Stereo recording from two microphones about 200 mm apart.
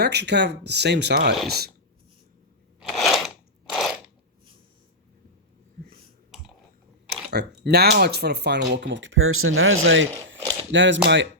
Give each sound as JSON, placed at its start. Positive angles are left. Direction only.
{"t": 0.0, "sound": "speech", "side_deg": -55}
{"t": 2.8, "sound": "crunch", "side_deg": 0}
{"t": 7.3, "sound": "speech", "side_deg": -55}